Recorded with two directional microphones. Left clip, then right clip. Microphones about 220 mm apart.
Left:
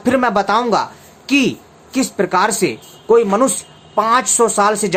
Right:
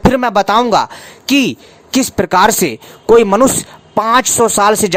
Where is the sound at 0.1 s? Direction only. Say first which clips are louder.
Right 3 dB; 45° right (ahead or behind).